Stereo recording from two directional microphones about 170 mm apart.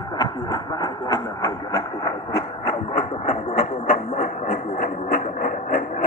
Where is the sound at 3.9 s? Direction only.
50° left (ahead or behind).